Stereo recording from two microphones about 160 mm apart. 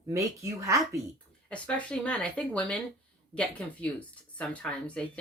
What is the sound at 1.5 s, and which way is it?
Speech, 10° left (ahead or behind).